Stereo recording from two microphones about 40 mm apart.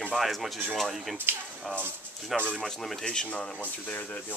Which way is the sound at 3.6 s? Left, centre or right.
Left.